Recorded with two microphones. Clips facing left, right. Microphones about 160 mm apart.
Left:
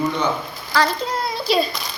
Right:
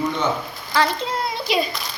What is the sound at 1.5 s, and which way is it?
Speech, 15° right (ahead or behind).